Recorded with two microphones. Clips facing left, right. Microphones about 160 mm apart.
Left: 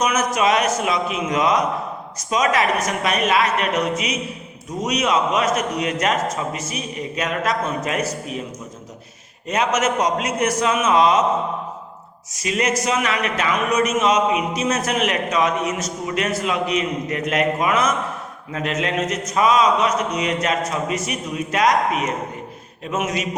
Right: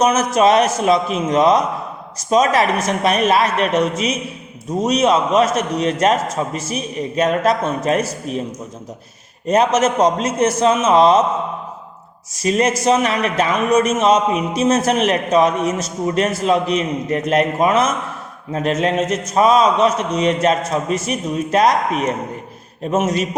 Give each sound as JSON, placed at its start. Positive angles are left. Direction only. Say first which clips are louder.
{"t": 0.0, "sound": "a man's voice", "louder": "right 5 dB", "side_deg": -30}
{"t": 9.5, "sound": "a man's voice", "louder": "right 5 dB", "side_deg": -30}
{"t": 12.4, "sound": "a man's voice", "louder": "right 5 dB", "side_deg": -35}